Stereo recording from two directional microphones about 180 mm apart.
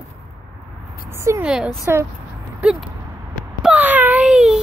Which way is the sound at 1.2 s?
15° right (ahead or behind).